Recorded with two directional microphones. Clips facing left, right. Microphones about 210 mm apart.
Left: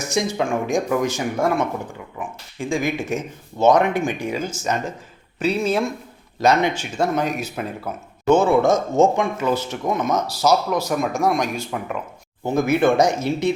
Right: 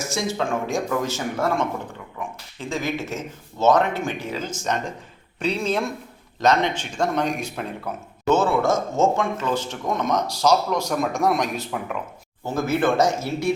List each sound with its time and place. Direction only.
0.0 s speech: 15° left (ahead or behind)
8.3 s speech: 15° left (ahead or behind); by 11.9 s centre (ahead or behind)
12.5 s speech: 15° left (ahead or behind)